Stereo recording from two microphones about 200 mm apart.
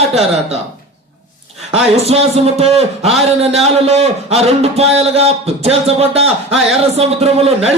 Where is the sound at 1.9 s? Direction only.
30° right (ahead or behind).